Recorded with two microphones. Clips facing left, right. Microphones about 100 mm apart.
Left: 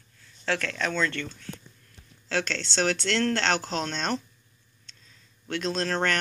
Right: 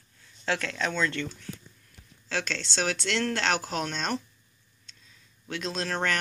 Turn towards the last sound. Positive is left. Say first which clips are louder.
# left 3 dB
turn(degrees=-5)  # may be behind; listen again after turning